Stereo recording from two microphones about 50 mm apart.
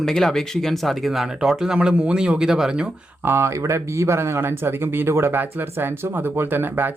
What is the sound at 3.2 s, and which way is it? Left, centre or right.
Speech, right.